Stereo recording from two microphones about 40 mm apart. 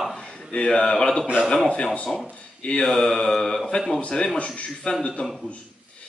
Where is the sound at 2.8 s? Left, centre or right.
Centre.